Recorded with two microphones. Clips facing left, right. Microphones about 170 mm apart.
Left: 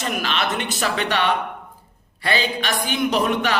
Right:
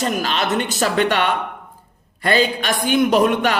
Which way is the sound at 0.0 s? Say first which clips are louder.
Right 3 dB; 40° right (ahead or behind).